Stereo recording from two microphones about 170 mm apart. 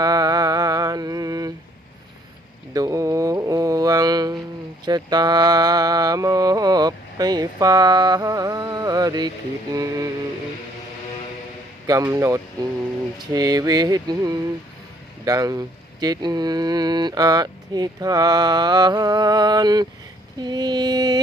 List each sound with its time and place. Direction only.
0.0 s a sound: 25° right (ahead or behind)
2.7 s a sound: 20° right (ahead or behind)
4.9 s mantra: 25° right (ahead or behind)
9.7 s speech: 20° right (ahead or behind)
11.9 s speech: 20° right (ahead or behind)
20.4 s mantra: 25° right (ahead or behind)